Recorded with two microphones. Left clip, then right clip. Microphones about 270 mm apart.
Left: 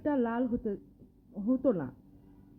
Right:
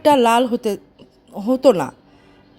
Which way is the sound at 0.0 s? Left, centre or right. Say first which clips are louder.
Right 18 dB; right.